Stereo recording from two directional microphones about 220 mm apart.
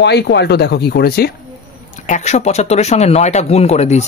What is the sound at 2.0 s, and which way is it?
Speech, 30° left (ahead or behind).